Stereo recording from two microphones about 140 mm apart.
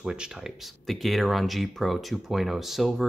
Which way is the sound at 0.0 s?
5° right (ahead or behind).